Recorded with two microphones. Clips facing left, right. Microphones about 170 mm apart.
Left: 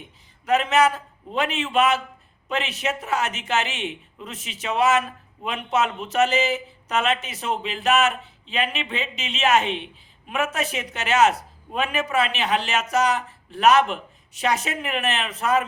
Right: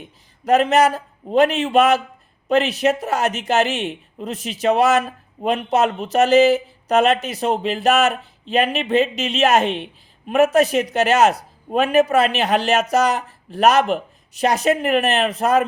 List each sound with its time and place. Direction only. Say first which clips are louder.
0.4 s a woman's voice: right 4 dB; 40° right (ahead or behind)